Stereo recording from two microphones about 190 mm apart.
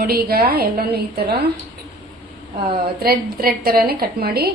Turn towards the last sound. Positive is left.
turn(degrees=-55)  # may be behind; listen again after turning